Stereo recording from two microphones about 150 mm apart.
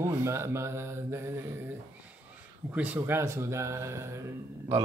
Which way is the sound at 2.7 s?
10° right (ahead or behind).